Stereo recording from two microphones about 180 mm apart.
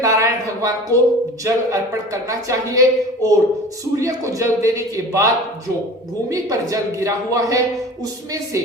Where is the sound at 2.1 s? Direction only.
20° right (ahead or behind).